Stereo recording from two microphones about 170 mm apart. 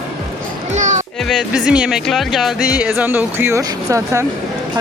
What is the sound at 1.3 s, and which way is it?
Speech, 5° right (ahead or behind).